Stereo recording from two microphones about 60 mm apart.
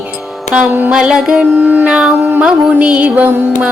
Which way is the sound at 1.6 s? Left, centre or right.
Right.